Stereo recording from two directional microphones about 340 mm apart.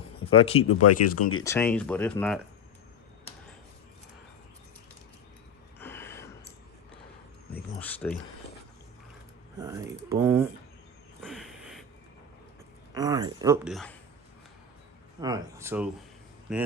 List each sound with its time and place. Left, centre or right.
0.3 s speech: centre
0.7 s speech: left
1.5 s speech: centre
5.8 s a sound: centre
7.8 s a sound: centre
9.6 s speech: centre
11.2 s a sound: centre
12.9 s speech: centre
15.2 s speech: centre